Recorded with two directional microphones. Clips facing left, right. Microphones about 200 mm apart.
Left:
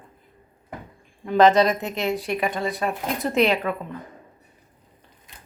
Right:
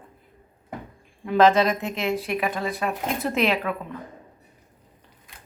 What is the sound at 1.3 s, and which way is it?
Speech, centre (ahead or behind).